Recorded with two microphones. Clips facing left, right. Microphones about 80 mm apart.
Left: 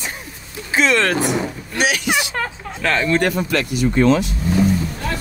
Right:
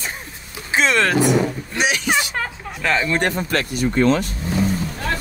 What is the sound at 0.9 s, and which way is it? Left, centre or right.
Speech, centre.